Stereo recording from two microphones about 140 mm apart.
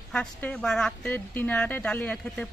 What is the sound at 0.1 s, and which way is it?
Speech, 10° left (ahead or behind).